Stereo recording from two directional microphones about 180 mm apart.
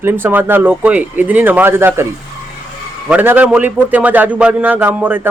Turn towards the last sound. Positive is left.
turn(degrees=-10)  # may be behind; listen again after turning